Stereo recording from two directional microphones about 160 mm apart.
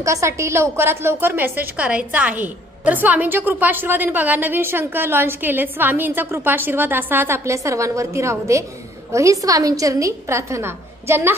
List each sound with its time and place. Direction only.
0.0 s a woman's voice: 20° right (ahead or behind)